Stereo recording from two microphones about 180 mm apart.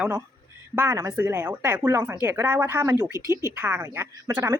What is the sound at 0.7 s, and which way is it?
Speech, 15° right (ahead or behind).